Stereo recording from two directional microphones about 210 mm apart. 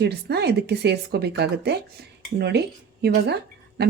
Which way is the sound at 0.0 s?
50° right (ahead or behind).